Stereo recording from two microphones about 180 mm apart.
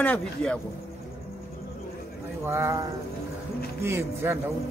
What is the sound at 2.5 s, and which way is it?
A man's voice, 15° right (ahead or behind).